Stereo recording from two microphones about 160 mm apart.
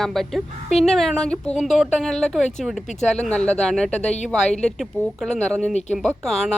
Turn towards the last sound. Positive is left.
turn(degrees=0)  # may be behind; listen again after turning